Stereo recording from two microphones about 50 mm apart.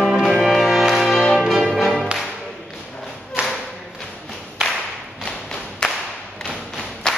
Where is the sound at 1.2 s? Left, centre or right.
Centre.